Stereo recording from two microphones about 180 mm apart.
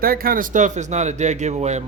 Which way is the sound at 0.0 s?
55° right (ahead or behind).